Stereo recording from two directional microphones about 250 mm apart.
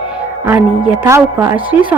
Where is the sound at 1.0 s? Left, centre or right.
Centre.